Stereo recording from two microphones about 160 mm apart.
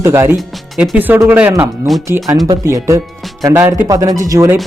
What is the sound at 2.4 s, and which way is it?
Speech, 20° right (ahead or behind).